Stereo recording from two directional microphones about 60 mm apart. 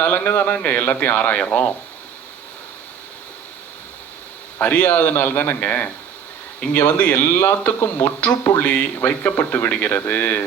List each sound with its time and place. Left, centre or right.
0.0 s a man's voice: left
4.6 s a man's voice: left